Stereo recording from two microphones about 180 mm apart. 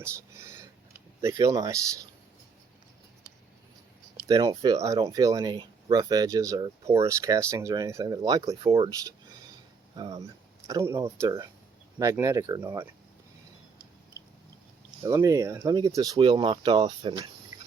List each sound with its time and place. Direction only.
0.0 s whispering: 15° right (ahead or behind)
1.2 s speech: 20° right (ahead or behind)
4.3 s speech: 20° right (ahead or behind)
15.0 s speech: 15° right (ahead or behind)